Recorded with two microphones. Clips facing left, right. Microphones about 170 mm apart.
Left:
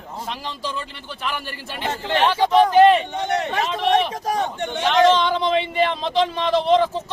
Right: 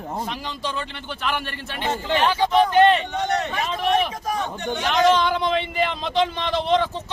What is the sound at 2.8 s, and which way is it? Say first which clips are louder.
Speech: left 3 dB; 5° left (ahead or behind).